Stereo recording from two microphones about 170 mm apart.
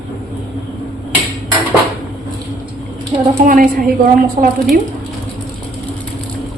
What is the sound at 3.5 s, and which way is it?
A woman's voice, 55° right (ahead or behind).